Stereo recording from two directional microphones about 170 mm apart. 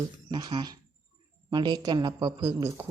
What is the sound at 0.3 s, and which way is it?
Speech, 25° right (ahead or behind).